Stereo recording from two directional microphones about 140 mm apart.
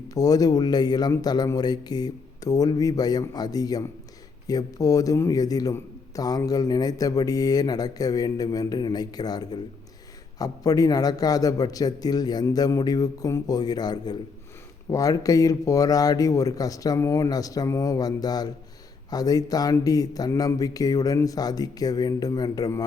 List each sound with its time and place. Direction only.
0.1 s a man's voice: 25° left (ahead or behind)